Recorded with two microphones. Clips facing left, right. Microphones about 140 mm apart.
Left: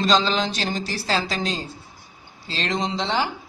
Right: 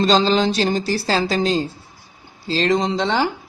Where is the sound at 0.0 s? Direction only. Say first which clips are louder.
Right 5 dB; 35° right (ahead or behind).